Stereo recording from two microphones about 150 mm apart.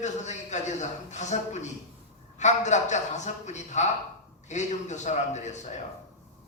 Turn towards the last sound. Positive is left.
turn(degrees=50)  # may be behind; listen again after turning